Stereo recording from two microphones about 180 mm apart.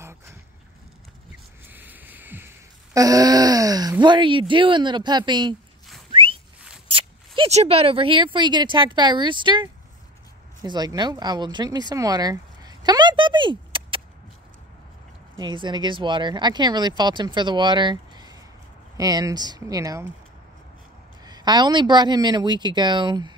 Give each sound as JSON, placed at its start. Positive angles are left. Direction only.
{"t": 0.0, "sound": "a sound", "side_deg": -15}
{"t": 1.7, "sound": "a sound", "side_deg": -10}
{"t": 4.0, "sound": "speech", "side_deg": -25}
{"t": 6.1, "sound": "whistling", "side_deg": -30}
{"t": 6.9, "sound": "speech", "side_deg": -30}
{"t": 15.3, "sound": "speech", "side_deg": -25}
{"t": 21.2, "sound": "speech", "side_deg": -25}